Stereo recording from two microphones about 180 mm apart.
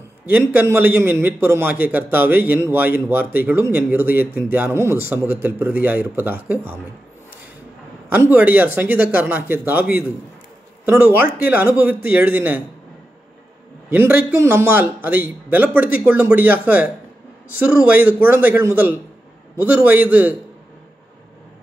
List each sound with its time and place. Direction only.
0.3 s a man's voice: 10° right (ahead or behind)
8.1 s a man's voice: 10° right (ahead or behind)
13.8 s a man's voice: 10° right (ahead or behind)